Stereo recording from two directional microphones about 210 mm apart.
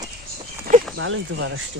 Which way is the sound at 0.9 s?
65° right (ahead or behind).